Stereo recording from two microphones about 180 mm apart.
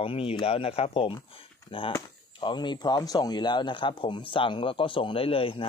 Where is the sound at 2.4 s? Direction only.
25° left (ahead or behind).